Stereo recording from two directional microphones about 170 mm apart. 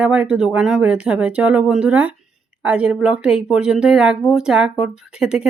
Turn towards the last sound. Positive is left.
turn(degrees=-5)  # may be behind; listen again after turning